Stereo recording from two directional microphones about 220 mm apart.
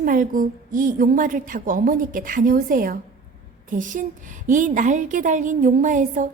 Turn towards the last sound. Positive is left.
turn(degrees=-35)  # may be behind; listen again after turning